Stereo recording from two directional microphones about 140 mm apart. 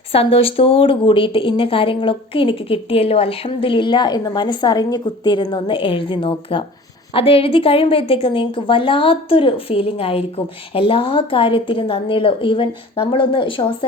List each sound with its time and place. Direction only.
0.1 s a woman's voice: 40° left (ahead or behind)